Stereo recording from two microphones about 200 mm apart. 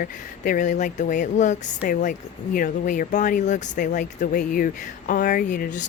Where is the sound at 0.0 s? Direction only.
40° left (ahead or behind).